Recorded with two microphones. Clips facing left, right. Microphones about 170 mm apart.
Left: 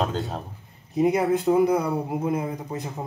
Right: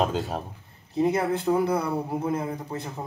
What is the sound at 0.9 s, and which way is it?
Speech, 15° left (ahead or behind).